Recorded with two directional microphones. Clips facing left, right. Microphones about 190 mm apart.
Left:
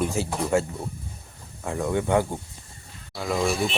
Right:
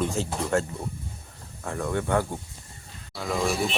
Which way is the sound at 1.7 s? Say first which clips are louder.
Left 3 dB; 15° left (ahead or behind).